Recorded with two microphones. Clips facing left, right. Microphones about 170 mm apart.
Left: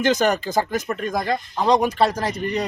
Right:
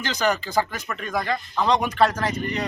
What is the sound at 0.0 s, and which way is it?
A man's voice, 50° left (ahead or behind).